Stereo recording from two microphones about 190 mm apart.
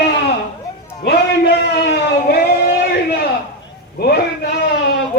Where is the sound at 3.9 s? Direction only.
55° left (ahead or behind).